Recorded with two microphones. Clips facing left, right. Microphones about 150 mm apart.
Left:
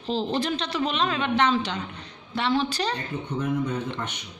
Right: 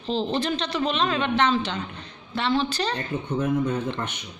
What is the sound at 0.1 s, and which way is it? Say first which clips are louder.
A man's voice: right 1 dB; 10° left (ahead or behind).